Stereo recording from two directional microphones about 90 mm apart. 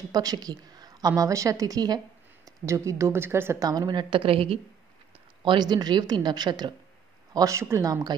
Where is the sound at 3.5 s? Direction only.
45° right (ahead or behind).